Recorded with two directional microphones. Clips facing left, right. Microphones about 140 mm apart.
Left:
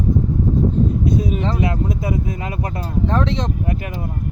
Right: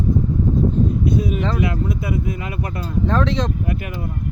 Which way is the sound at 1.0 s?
35° left (ahead or behind).